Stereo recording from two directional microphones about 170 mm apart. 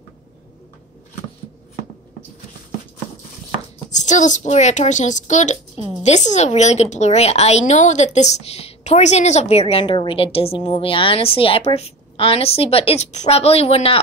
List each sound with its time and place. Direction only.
4.0 s a child's voice: 45° left (ahead or behind)